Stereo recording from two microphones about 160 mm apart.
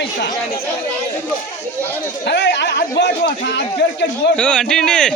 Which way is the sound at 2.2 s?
90° left.